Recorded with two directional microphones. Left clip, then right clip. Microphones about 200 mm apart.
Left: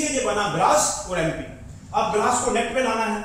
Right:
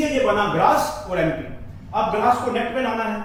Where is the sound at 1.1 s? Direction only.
15° left (ahead or behind).